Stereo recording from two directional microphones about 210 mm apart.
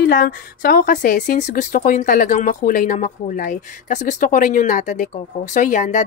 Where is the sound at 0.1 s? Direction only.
45° left (ahead or behind).